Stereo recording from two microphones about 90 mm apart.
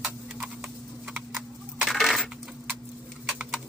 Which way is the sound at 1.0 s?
Centre (ahead or behind).